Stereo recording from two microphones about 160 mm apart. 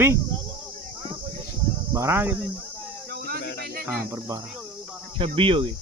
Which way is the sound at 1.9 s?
15° right (ahead or behind).